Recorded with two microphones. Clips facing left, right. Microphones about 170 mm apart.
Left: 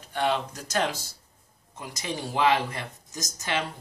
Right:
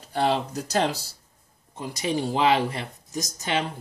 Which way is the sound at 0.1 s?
35° right (ahead or behind).